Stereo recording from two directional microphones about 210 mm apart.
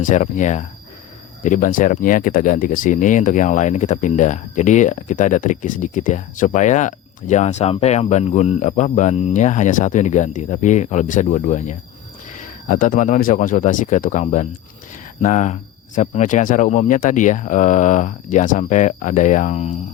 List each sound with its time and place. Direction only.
0.0 s speech: 35° left (ahead or behind)